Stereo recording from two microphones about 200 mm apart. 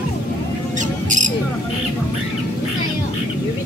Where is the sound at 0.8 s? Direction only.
40° right (ahead or behind).